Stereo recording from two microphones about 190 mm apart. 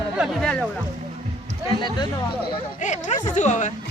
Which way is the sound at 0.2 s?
Centre (ahead or behind).